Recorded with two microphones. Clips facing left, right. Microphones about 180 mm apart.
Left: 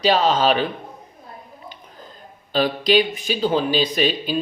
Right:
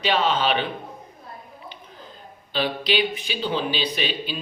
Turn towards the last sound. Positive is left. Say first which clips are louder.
# left 7 dB
turn(degrees=45)  # may be behind; listen again after turning